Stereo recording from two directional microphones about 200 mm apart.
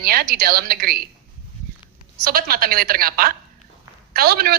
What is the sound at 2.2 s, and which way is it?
A woman's voice, 50° right (ahead or behind).